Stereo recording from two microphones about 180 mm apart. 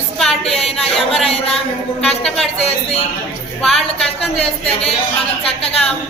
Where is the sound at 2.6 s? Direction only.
35° left (ahead or behind).